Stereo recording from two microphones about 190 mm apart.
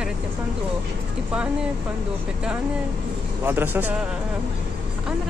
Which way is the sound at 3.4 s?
10° right (ahead or behind).